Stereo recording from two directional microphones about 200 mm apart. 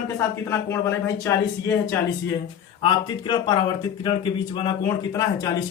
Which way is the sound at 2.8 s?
25° left (ahead or behind).